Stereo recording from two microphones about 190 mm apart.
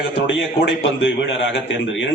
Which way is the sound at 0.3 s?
80° left.